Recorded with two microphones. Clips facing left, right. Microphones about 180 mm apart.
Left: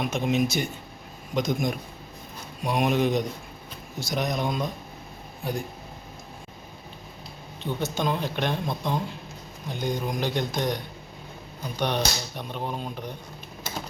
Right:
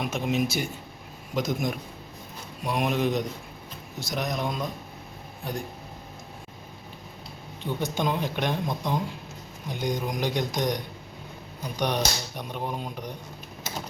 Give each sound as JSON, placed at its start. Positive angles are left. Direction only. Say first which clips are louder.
{"t": 0.0, "sound": "speech", "louder": "left 2 dB", "side_deg": -5}
{"t": 7.6, "sound": "speech", "louder": "even", "side_deg": -15}
{"t": 11.8, "sound": "speech", "louder": "even", "side_deg": -15}